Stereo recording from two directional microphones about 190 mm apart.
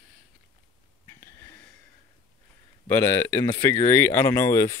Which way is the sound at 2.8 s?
10° left (ahead or behind).